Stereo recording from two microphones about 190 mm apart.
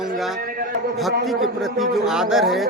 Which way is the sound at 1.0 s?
Centre (ahead or behind).